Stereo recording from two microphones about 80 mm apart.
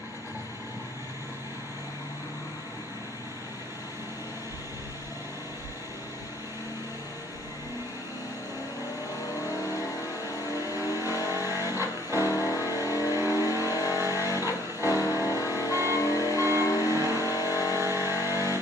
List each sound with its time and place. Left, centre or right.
10.5 s vehicle: left
11.3 s vehicle: right
11.6 s vehicle: left
13.9 s vehicle: right
14.9 s vehicle: left
17.7 s vehicle: right
18.3 s vehicle: left